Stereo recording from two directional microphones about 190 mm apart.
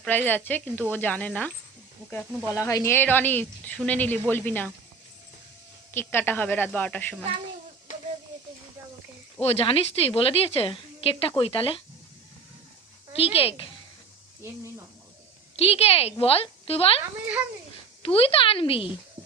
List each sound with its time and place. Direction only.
0.0 s speech: 10° left (ahead or behind)
5.9 s speech: 10° left (ahead or behind)
9.4 s a woman's voice: 30° left (ahead or behind)
13.1 s a woman's voice: 30° left (ahead or behind)
15.5 s a woman's voice: 30° left (ahead or behind)
18.0 s a woman's voice: 30° left (ahead or behind)